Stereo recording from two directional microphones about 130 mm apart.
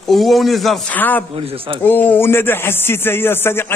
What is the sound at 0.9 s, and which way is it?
Speech, 15° left (ahead or behind).